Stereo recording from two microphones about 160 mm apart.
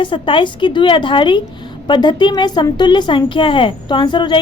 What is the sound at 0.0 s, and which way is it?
A woman's voice, 30° left (ahead or behind).